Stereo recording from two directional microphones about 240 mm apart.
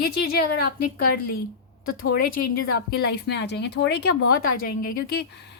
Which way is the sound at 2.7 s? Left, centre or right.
Left.